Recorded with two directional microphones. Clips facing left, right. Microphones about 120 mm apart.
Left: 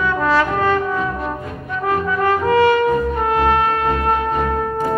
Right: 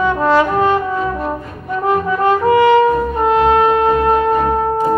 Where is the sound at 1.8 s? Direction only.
25° right (ahead or behind).